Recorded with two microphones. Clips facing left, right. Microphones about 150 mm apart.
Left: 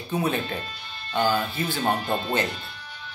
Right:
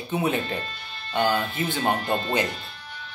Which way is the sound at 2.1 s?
5° left (ahead or behind).